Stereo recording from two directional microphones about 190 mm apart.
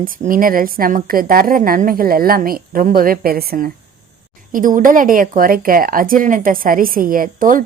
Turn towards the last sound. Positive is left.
turn(degrees=-45)  # may be behind; listen again after turning